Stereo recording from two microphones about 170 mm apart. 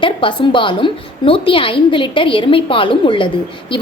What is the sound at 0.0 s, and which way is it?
A woman's voice, 30° left (ahead or behind).